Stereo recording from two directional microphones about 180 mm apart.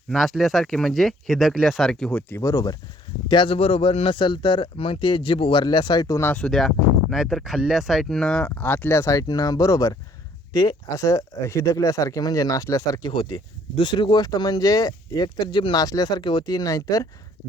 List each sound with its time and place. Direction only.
0.1 s speech: centre (ahead or behind)
2.4 s speech: 20° left (ahead or behind)